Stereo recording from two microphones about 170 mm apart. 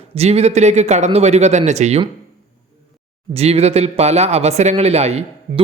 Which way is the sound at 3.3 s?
35° right (ahead or behind).